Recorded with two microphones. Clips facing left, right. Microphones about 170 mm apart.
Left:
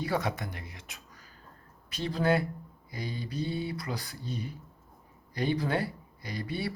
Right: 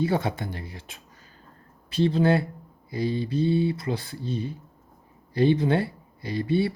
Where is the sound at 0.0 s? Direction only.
25° right (ahead or behind).